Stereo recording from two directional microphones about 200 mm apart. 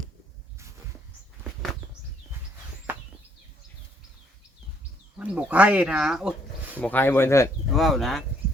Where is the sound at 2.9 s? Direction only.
10° right (ahead or behind).